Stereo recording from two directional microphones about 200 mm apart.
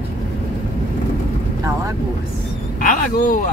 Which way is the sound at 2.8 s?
40° left (ahead or behind).